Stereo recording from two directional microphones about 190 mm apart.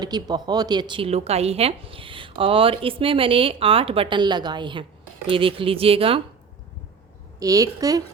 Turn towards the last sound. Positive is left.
turn(degrees=-20)  # may be behind; listen again after turning